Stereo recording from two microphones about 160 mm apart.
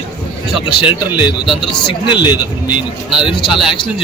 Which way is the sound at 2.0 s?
30° left (ahead or behind).